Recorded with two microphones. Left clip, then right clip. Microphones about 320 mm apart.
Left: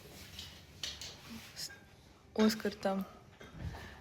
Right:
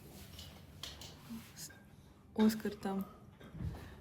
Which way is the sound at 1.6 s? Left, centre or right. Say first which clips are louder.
Left 12 dB; centre.